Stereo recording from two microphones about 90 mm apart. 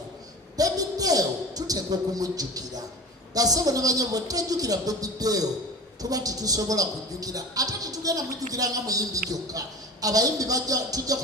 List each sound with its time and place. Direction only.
0.5 s a man's voice: 45° right (ahead or behind)